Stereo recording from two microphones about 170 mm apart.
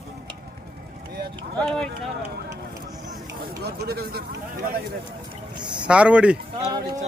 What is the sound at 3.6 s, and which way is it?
Speech, 65° right (ahead or behind).